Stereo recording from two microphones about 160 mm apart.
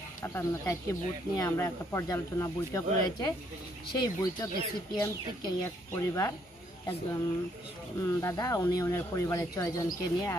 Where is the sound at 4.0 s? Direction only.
25° left (ahead or behind).